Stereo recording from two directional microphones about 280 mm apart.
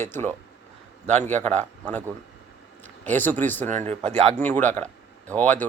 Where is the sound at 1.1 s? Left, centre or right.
Right.